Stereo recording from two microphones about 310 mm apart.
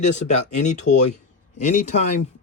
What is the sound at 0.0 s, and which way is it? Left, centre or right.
Speech, left.